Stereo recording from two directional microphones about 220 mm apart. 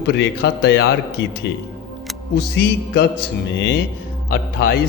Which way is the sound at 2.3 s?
50° left (ahead or behind).